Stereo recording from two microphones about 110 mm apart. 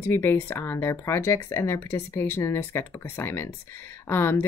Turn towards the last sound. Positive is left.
turn(degrees=20)  # may be behind; listen again after turning